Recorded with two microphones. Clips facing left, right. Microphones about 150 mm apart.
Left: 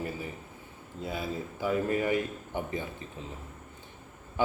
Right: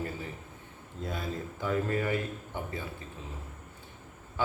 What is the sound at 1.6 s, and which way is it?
A man's voice, 15° left (ahead or behind).